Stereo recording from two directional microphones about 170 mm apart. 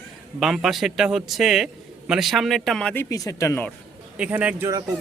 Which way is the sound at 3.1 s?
20° left (ahead or behind).